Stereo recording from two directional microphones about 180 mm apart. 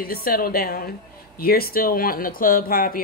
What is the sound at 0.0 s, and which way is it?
Speech, 55° left (ahead or behind).